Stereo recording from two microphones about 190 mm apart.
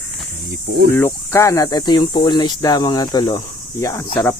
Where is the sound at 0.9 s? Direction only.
15° left (ahead or behind).